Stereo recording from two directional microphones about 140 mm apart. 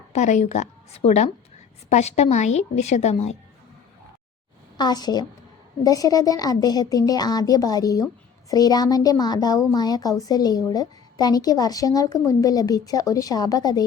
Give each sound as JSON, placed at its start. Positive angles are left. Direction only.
{"t": 0.1, "sound": "a woman's voice", "side_deg": 55}
{"t": 4.8, "sound": "speech", "side_deg": 30}